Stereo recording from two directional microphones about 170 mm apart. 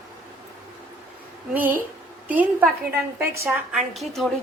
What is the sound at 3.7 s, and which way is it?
Speech, centre (ahead or behind).